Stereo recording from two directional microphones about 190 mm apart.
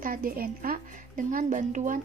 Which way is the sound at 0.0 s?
50° right (ahead or behind).